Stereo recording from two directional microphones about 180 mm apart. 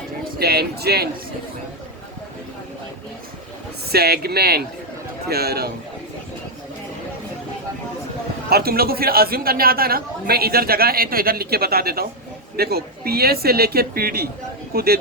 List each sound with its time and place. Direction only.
0.3 s a man's voice: 60° right (ahead or behind)
3.9 s a man's voice: 60° right (ahead or behind)
8.4 s a man's voice: 60° right (ahead or behind)